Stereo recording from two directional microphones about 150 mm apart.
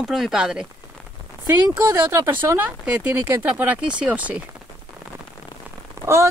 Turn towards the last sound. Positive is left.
turn(degrees=-20)  # may be behind; listen again after turning